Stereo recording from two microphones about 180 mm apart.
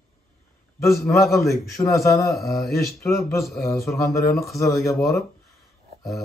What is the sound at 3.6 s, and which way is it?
Speech, 15° left (ahead or behind).